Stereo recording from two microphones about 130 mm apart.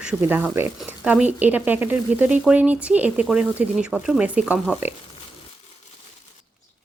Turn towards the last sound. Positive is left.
turn(degrees=-10)  # may be behind; listen again after turning